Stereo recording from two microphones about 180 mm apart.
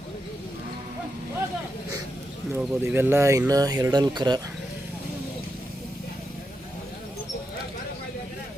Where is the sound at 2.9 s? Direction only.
15° right (ahead or behind).